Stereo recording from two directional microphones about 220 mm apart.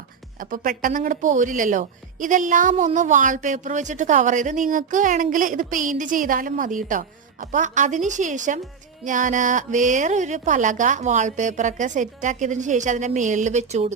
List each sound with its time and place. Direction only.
0.3 s speech: 40° right (ahead or behind)